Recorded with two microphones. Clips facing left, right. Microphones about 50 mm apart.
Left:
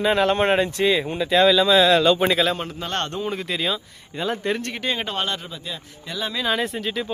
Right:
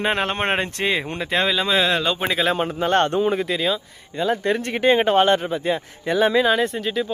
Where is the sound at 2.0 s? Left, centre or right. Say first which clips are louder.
Left 4 dB; centre.